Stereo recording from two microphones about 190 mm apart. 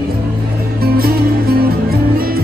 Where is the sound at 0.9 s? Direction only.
50° right (ahead or behind).